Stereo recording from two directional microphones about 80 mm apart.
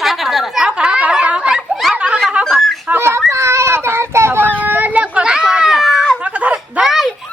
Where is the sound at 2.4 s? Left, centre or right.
Centre.